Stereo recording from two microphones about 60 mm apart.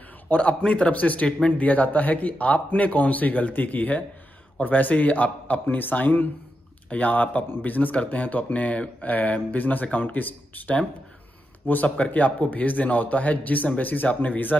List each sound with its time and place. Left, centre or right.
0.3 s speech: left